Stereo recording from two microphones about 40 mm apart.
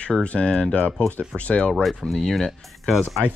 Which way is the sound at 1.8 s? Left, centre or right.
Centre.